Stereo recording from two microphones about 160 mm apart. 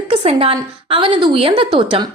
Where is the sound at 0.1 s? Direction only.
35° right (ahead or behind).